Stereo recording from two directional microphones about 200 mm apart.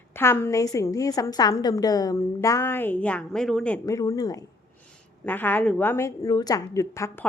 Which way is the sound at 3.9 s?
15° left (ahead or behind).